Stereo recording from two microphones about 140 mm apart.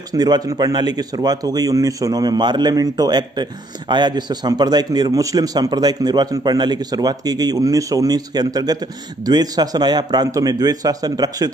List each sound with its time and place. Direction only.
0.1 s a man's voice: 25° right (ahead or behind)